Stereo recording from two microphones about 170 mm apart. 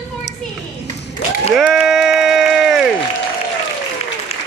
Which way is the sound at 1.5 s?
Centre (ahead or behind).